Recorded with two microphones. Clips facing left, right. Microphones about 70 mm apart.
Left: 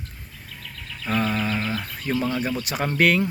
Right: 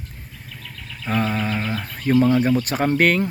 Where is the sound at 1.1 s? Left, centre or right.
Right.